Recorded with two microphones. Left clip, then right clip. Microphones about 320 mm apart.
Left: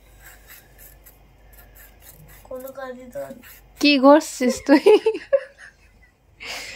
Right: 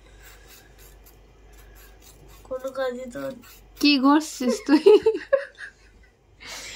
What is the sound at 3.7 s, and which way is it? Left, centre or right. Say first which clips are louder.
Speech: left 6 dB; centre.